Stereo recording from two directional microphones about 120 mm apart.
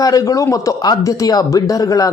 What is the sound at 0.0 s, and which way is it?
Speech, 30° left (ahead or behind).